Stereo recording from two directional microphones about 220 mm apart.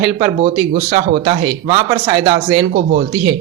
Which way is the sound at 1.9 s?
20° right (ahead or behind).